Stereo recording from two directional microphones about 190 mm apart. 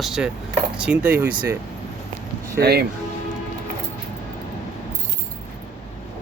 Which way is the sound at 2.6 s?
55° right (ahead or behind).